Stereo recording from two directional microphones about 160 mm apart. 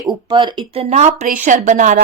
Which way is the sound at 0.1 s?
30° right (ahead or behind).